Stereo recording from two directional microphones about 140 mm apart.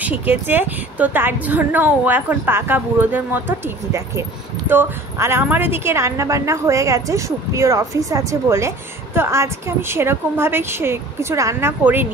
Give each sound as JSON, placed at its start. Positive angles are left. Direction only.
{"t": 0.0, "sound": "a woman's voice", "side_deg": -15}